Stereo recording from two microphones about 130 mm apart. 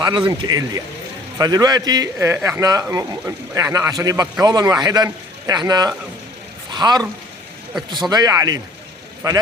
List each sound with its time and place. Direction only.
0.0 s speech: 35° right (ahead or behind)
8.1 s speech: 30° right (ahead or behind)